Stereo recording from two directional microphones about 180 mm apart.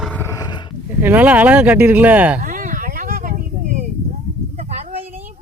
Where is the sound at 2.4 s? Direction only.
50° right (ahead or behind).